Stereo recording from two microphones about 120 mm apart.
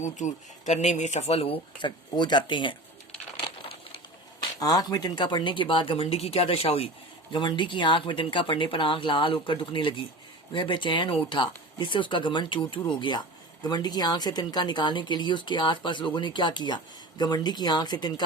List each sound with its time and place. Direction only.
0.0 s speech: 80° left; by 1.5 s 55° left (ahead or behind)
1.8 s speech: 40° left (ahead or behind)
3.3 s a sound: 45° left (ahead or behind)
4.6 s speech: 30° left (ahead or behind)